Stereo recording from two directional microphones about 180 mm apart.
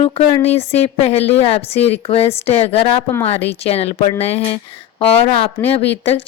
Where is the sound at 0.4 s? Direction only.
35° left (ahead or behind).